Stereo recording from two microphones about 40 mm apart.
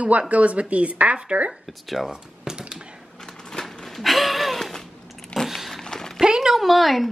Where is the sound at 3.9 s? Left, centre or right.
Centre.